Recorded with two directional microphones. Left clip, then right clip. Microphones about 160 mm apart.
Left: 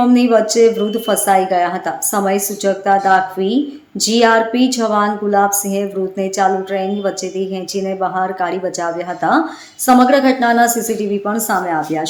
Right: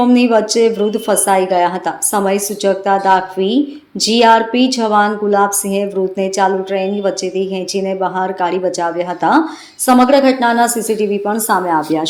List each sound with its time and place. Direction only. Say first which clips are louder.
0.0 s a woman's voice: even; 15° right (ahead or behind)